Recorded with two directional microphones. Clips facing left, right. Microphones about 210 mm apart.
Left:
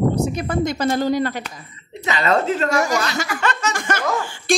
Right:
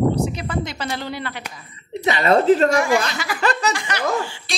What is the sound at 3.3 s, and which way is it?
Speech, 35° right (ahead or behind).